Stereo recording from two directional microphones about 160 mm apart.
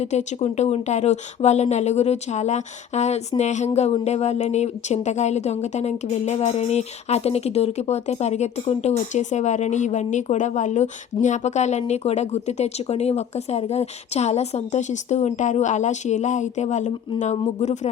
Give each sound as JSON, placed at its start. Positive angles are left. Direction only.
{"t": 0.0, "sound": "a woman's voice", "side_deg": 45}